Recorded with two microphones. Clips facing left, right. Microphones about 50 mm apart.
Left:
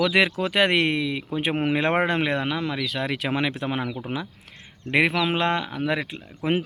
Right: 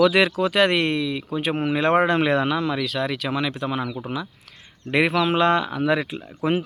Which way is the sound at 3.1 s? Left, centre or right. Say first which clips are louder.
Even; left.